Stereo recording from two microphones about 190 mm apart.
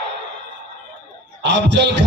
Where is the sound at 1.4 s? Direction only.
65° right (ahead or behind).